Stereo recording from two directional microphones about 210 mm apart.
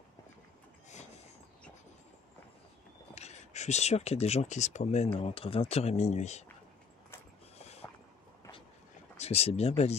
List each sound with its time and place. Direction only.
3.2 s speech: 30° left (ahead or behind)
7.5 s a sound: 30° left (ahead or behind)
9.2 s speech: 30° left (ahead or behind)